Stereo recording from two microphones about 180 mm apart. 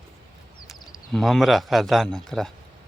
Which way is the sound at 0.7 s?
Centre (ahead or behind).